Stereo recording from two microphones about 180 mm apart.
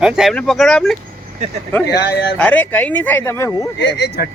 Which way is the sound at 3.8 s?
70° left (ahead or behind).